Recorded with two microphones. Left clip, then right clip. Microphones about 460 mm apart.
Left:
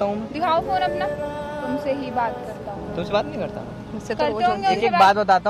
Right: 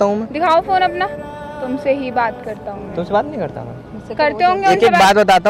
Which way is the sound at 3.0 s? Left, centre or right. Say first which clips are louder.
Right 6 dB; centre.